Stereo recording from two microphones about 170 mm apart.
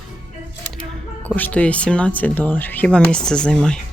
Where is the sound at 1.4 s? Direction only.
5° left (ahead or behind).